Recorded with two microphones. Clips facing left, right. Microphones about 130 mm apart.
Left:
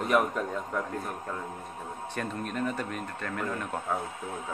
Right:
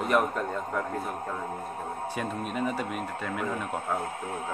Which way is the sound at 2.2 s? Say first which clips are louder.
Even; 5° right (ahead or behind).